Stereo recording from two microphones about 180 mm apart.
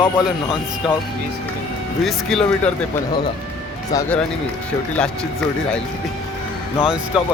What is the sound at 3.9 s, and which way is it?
Speech, 20° left (ahead or behind).